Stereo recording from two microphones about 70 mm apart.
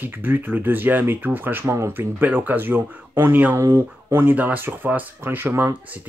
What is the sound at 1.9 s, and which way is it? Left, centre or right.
Speech, right.